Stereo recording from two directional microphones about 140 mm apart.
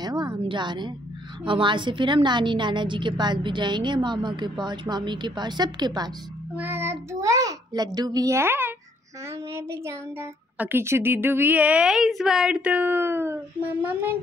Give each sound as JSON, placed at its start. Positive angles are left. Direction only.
{"t": 0.0, "sound": "a sound", "side_deg": -30}
{"t": 1.4, "sound": "a woman's voice", "side_deg": -35}
{"t": 6.5, "sound": "a child's voice", "side_deg": -15}